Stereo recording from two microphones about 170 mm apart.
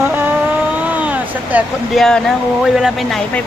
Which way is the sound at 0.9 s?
10° right (ahead or behind).